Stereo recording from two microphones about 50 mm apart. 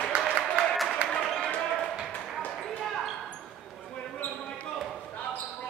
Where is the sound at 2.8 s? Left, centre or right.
Centre.